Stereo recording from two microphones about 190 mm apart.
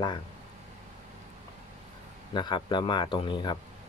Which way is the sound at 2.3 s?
25° left (ahead or behind).